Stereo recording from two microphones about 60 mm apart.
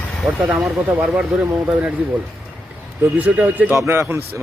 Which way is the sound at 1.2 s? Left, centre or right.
Centre.